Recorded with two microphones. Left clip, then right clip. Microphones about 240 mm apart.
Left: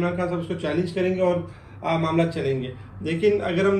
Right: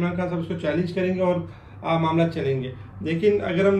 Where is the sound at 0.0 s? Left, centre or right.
Centre.